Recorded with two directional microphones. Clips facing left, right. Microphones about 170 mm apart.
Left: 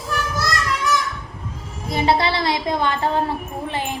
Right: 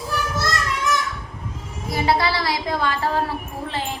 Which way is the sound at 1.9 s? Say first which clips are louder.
Left 2 dB; 25° left (ahead or behind).